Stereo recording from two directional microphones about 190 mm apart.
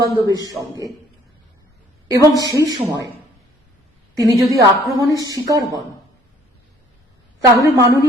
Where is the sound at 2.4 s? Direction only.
20° right (ahead or behind).